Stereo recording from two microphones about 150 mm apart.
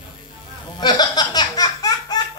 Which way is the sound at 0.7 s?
30° left (ahead or behind).